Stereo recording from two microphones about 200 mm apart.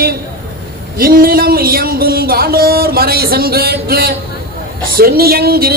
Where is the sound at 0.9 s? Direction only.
45° right (ahead or behind).